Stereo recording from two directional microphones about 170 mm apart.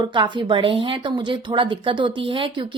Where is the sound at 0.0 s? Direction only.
25° right (ahead or behind).